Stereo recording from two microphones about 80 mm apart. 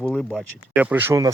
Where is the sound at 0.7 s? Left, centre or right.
Right.